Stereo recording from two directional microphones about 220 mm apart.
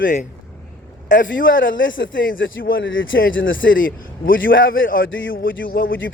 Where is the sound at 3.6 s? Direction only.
40° left (ahead or behind).